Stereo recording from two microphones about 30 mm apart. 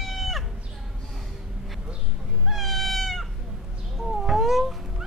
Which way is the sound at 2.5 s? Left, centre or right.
Centre.